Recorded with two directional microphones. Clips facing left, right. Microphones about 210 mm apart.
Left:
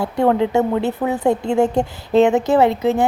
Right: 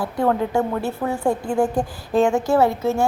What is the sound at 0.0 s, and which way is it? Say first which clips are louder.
A woman's voice: left 4 dB; 25° left (ahead or behind).